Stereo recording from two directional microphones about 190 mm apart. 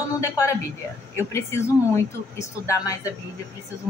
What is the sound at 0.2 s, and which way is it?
A woman's voice, 15° left (ahead or behind).